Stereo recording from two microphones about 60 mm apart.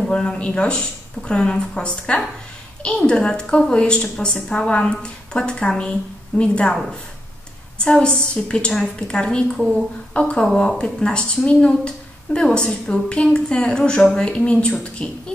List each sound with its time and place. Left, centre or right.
0.1 s speech: centre
9.6 s a woman's voice: centre
10.1 s speech: left